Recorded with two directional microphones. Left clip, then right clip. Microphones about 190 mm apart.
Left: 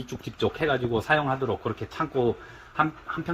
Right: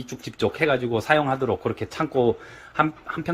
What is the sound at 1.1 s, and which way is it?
Speech, 20° right (ahead or behind).